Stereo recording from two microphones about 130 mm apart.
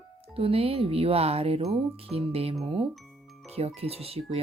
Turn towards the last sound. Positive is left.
turn(degrees=-45)  # may be behind; listen again after turning